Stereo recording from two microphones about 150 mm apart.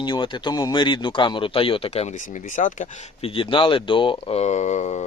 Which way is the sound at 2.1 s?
60° left (ahead or behind).